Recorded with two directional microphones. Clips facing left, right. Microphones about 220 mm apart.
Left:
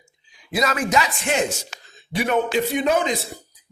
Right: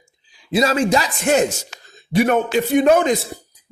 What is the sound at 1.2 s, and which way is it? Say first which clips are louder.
A man's voice: right 6 dB; 45° right (ahead or behind).